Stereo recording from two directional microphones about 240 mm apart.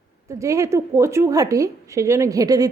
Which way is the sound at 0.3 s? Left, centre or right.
Centre.